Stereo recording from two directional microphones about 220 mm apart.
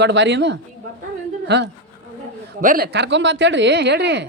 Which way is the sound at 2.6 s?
40° right (ahead or behind).